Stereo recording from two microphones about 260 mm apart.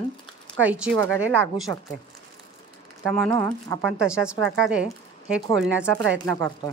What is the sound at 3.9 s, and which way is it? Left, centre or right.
Speech, centre.